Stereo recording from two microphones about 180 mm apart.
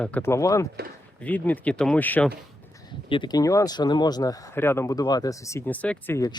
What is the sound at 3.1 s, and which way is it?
Speech, 25° left (ahead or behind).